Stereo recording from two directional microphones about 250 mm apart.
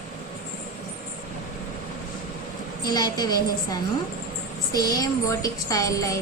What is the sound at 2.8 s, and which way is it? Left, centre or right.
A woman's voice, centre.